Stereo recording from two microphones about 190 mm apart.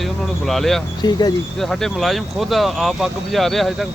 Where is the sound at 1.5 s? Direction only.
Centre (ahead or behind).